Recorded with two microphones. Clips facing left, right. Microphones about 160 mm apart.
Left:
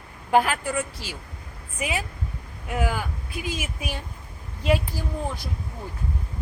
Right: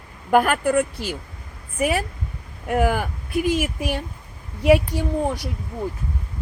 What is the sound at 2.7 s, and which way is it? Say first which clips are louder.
Speech: right 7 dB; 55° right (ahead or behind).